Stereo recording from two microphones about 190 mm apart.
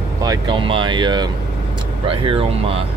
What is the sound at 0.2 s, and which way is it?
Speech, 20° right (ahead or behind).